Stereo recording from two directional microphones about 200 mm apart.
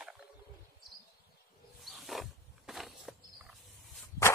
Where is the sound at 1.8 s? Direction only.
Centre (ahead or behind).